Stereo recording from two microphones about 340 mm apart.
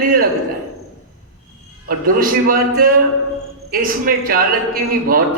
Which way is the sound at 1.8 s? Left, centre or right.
Right.